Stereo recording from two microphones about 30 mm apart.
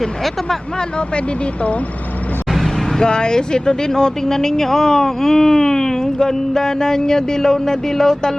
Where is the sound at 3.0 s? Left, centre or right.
Left.